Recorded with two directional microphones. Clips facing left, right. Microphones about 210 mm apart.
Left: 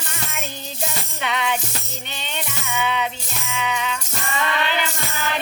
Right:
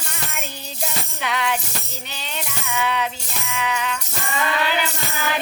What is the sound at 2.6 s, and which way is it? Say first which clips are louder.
Music: even; centre (ahead or behind).